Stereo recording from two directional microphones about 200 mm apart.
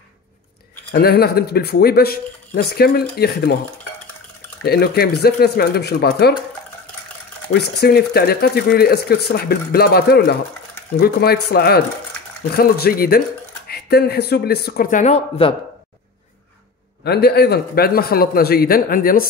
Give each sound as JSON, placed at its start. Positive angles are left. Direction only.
{"t": 0.9, "sound": "speech", "side_deg": 50}
{"t": 4.6, "sound": "speech", "side_deg": 50}
{"t": 7.5, "sound": "speech", "side_deg": 55}
{"t": 17.0, "sound": "speech", "side_deg": 55}